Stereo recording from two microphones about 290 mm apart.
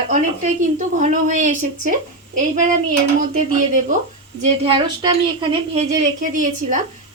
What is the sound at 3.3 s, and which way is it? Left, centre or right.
A woman's voice, right.